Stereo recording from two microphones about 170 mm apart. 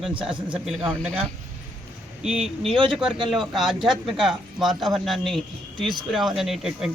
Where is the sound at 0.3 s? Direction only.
30° right (ahead or behind).